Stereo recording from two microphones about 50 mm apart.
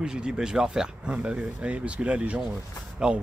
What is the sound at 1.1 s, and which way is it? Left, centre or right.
Speech, right.